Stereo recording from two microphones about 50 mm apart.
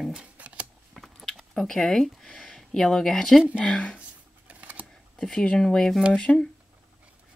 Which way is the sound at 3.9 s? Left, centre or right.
Right.